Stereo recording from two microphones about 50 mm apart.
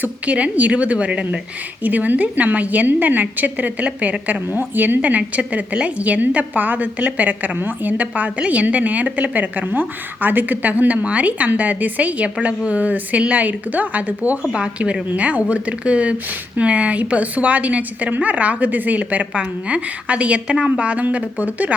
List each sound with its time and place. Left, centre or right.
0.0 s a woman's voice: right
14.4 s a woman's voice: right